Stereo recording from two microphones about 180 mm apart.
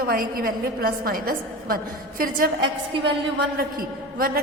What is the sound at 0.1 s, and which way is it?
A woman's voice, 55° right (ahead or behind).